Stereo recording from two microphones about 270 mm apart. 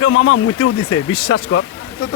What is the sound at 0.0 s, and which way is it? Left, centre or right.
Speech, left.